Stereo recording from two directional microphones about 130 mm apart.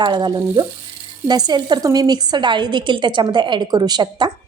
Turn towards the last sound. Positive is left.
turn(degrees=-35)  # may be behind; listen again after turning